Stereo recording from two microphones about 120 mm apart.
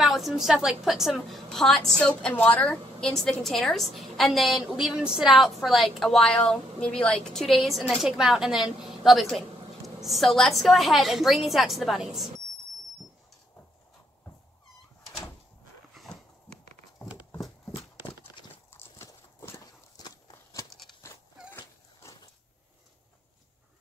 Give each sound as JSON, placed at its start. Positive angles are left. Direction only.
{"t": 0.0, "sound": "a woman's voice", "side_deg": 0}
{"t": 15.9, "sound": "a sound", "side_deg": 0}
{"t": 18.4, "sound": "horse", "side_deg": 40}
{"t": 18.7, "sound": "horse", "side_deg": 20}
{"t": 19.6, "sound": "walk", "side_deg": 35}
{"t": 21.0, "sound": "a sound", "side_deg": 25}